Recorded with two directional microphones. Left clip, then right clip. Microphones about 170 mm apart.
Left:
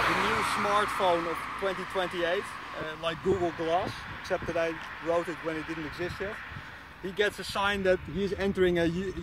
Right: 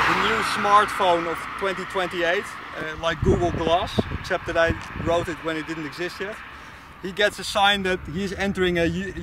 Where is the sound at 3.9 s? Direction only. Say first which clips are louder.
Right 12 dB; 20° left (ahead or behind).